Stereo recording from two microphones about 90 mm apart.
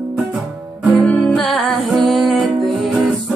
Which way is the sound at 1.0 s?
5° left (ahead or behind).